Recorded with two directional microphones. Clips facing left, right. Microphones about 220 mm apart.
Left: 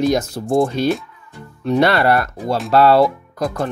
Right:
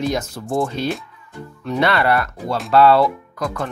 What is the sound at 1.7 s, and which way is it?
Speech, 40° left (ahead or behind).